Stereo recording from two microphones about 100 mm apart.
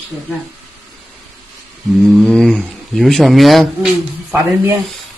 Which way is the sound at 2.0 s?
5° left (ahead or behind).